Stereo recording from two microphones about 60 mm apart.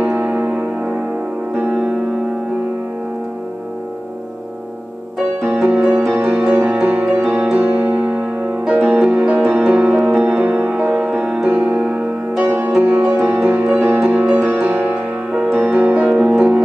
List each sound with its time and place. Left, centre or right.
0.0 s music: right
5.4 s music: centre
7.1 s music: right; by 12.4 s centre
12.4 s music: right